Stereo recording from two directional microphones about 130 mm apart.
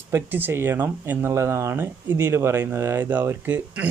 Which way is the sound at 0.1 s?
15° right (ahead or behind).